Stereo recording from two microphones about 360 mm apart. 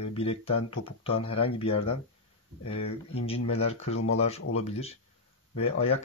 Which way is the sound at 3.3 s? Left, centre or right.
Centre.